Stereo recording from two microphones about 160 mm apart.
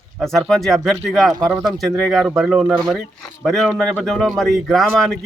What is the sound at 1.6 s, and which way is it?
Speech, centre (ahead or behind).